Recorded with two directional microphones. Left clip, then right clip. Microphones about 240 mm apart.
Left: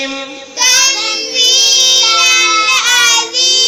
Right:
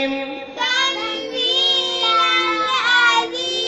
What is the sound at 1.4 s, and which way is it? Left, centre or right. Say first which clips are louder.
Music: left 8 dB; left.